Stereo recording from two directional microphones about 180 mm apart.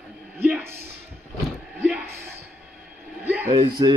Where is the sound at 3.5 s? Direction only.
30° right (ahead or behind).